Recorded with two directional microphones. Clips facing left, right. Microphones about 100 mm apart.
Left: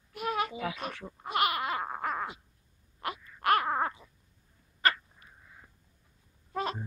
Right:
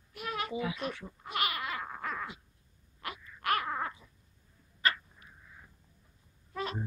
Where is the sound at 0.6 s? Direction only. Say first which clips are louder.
Even; 70° left (ahead or behind).